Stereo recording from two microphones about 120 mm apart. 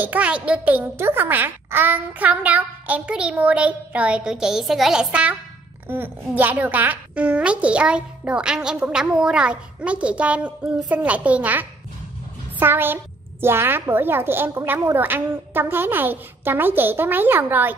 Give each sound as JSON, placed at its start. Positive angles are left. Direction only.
{"t": 0.0, "sound": "a child's voice", "side_deg": -15}